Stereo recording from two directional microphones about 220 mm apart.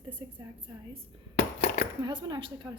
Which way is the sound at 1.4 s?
45° left (ahead or behind).